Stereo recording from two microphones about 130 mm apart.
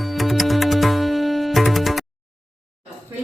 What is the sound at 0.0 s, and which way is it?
Music, centre (ahead or behind).